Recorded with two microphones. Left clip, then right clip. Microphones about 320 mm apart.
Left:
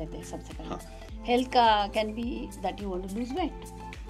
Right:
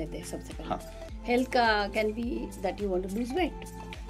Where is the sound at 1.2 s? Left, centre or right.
Left; by 3.4 s centre.